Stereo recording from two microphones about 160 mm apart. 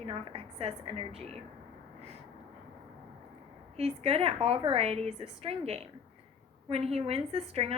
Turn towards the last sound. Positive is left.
turn(degrees=-40)  # may be behind; listen again after turning